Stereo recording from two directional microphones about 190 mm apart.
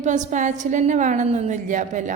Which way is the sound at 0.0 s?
40° right (ahead or behind).